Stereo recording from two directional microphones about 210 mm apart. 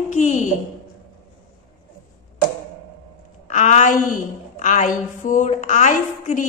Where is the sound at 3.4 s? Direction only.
35° left (ahead or behind).